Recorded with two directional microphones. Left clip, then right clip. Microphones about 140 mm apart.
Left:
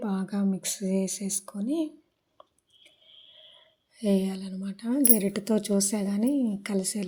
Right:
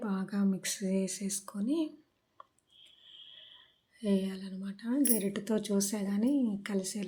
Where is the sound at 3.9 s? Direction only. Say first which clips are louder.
Left 6 dB; 35° left (ahead or behind).